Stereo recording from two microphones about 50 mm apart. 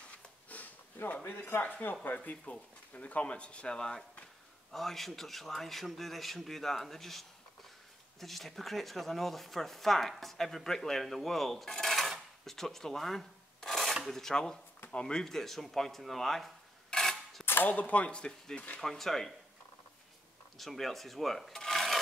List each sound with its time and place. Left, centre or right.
0.5 s a sound: left
1.1 s speech: left
2.5 s speech: left
4.6 s speech: centre
12.4 s filing: centre
14.0 s speech: centre
16.9 s a sound: centre
17.6 s speech: left
18.8 s speech: centre
20.5 s speech: centre